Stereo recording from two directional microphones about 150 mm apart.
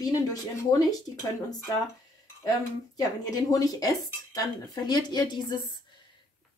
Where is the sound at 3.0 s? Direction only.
25° left (ahead or behind).